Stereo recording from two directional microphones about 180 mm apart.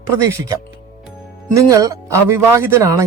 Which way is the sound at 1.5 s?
15° right (ahead or behind).